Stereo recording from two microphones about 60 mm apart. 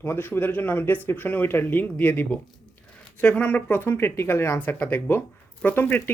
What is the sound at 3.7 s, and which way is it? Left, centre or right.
Speech, left.